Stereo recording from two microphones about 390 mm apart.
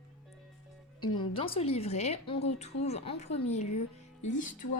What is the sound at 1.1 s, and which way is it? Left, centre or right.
Speech, centre.